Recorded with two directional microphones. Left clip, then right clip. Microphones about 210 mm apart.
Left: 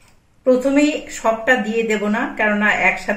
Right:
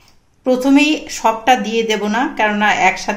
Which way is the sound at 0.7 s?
40° right (ahead or behind).